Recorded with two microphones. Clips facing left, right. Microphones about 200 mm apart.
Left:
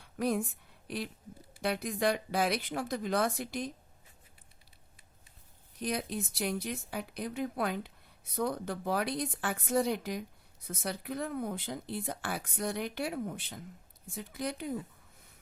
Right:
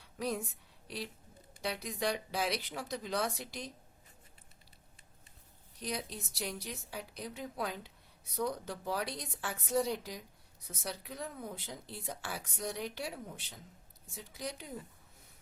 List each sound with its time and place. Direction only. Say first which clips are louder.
0.0 s a sound: left 6 dB; 55° left (ahead or behind)
0.9 s a woman's voice: left 5 dB; 55° left (ahead or behind)
5.8 s speech: left 6 dB; 55° left (ahead or behind)